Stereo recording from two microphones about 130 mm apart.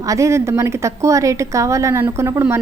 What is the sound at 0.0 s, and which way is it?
A woman's voice, 25° right (ahead or behind).